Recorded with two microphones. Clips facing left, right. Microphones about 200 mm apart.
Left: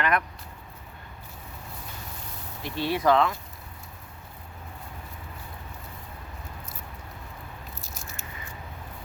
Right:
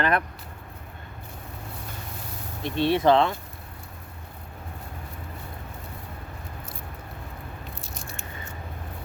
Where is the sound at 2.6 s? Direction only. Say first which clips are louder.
Right 5 dB; 25° right (ahead or behind).